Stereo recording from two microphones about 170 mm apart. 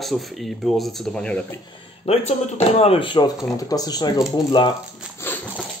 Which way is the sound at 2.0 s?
40° left (ahead or behind).